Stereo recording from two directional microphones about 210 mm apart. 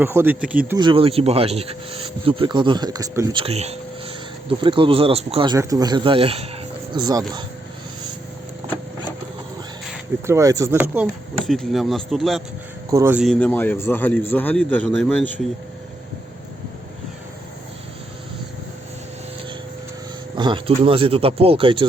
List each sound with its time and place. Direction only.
0.0 s speech: 10° right (ahead or behind)
0.8 s speech: 25° right (ahead or behind)
10.2 s speech: 15° right (ahead or behind)
10.9 s speech: centre (ahead or behind)
12.9 s speech: 10° right (ahead or behind)
13.2 s a man's voice: 10° left (ahead or behind)
20.3 s speech: 20° right (ahead or behind)